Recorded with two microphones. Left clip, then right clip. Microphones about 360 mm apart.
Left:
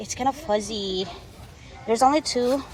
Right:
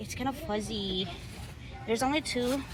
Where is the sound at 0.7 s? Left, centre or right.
Centre.